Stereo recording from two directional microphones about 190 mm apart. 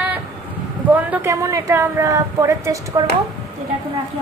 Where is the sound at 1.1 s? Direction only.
15° right (ahead or behind).